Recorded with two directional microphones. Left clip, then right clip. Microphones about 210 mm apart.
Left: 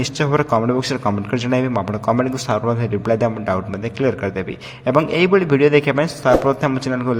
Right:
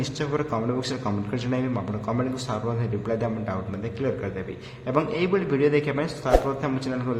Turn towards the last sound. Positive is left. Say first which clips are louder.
# left 8 dB
turn(degrees=40)  # may be behind; listen again after turning